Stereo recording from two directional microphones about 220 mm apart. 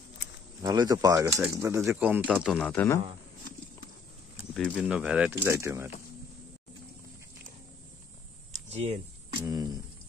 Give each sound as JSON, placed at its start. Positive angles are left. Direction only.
{"t": 0.6, "sound": "speech", "side_deg": -20}
{"t": 2.7, "sound": "a man's voice", "side_deg": 10}
{"t": 4.6, "sound": "speech", "side_deg": 5}
{"t": 8.6, "sound": "a sound", "side_deg": -30}
{"t": 9.4, "sound": "speech", "side_deg": -15}